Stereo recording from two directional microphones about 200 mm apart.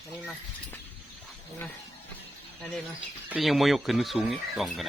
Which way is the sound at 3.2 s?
5° right (ahead or behind).